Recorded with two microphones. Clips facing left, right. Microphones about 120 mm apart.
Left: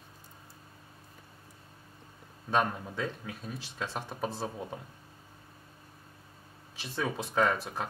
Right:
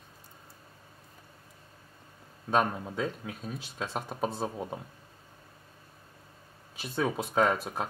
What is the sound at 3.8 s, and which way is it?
Speech, 25° right (ahead or behind).